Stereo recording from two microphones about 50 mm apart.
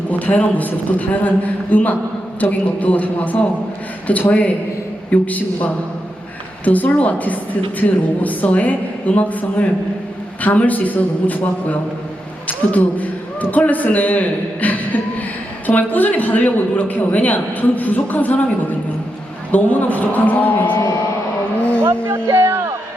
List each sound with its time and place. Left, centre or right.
0.1 s a man's voice: left
21.6 s vehicle: left
21.8 s speech: right
22.3 s speech: right